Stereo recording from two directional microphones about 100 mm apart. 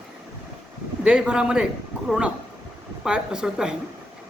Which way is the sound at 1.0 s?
10° right (ahead or behind).